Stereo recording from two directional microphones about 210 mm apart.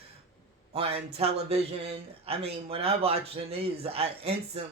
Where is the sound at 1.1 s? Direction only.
30° right (ahead or behind).